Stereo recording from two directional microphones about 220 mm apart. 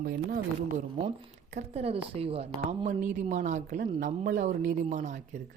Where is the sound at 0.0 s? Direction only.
40° right (ahead or behind).